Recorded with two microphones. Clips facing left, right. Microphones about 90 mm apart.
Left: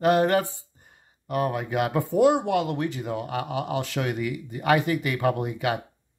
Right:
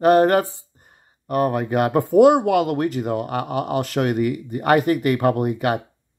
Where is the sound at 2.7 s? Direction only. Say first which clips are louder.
Right 6 dB; 55° right (ahead or behind).